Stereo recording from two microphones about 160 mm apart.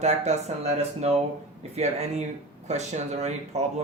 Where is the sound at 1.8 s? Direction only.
45° right (ahead or behind).